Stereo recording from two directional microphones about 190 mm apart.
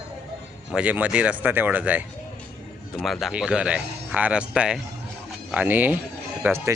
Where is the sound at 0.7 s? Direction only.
5° right (ahead or behind).